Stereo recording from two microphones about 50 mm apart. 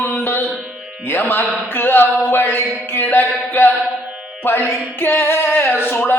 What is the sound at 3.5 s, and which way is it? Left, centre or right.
Music, left.